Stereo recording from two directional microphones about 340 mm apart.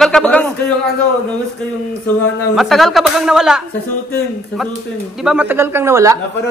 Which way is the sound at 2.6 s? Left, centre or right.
Centre.